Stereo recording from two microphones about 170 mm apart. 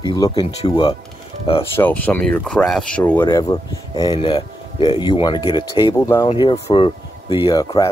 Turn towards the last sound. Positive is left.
turn(degrees=25)  # may be behind; listen again after turning